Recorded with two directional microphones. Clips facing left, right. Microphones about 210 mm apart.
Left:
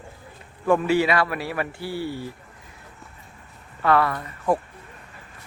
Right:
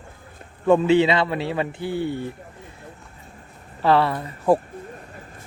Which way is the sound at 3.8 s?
30° right (ahead or behind).